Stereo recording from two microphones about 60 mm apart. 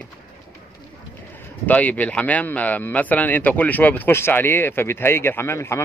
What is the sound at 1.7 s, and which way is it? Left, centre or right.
A man's voice, left.